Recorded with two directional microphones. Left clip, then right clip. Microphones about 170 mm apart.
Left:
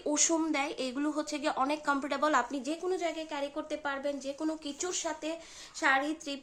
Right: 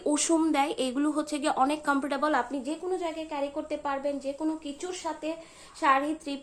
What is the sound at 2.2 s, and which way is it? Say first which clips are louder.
Speech: left 1 dB; 10° left (ahead or behind).